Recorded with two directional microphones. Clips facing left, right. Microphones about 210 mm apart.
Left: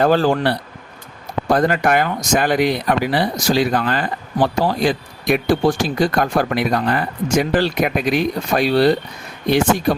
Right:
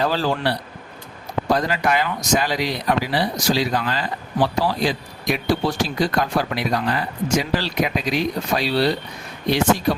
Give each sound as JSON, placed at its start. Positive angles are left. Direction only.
{"t": 0.0, "sound": "speech", "side_deg": 50}